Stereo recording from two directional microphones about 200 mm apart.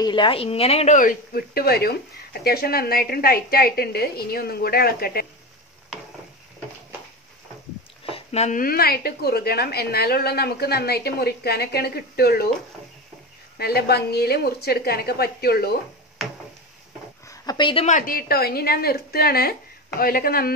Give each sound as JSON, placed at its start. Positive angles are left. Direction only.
{"t": 0.0, "sound": "speech", "side_deg": 25}
{"t": 8.0, "sound": "speech", "side_deg": 30}
{"t": 13.6, "sound": "speech", "side_deg": 55}
{"t": 16.2, "sound": "a sound", "side_deg": 0}
{"t": 17.3, "sound": "dog", "side_deg": 20}
{"t": 17.8, "sound": "speech", "side_deg": 40}